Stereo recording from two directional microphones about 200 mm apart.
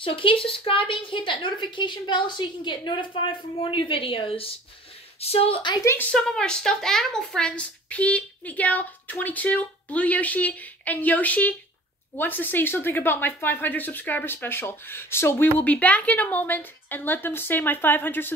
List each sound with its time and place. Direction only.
0.0 s a woman's voice: 25° left (ahead or behind)
6.1 s speech: 5° left (ahead or behind)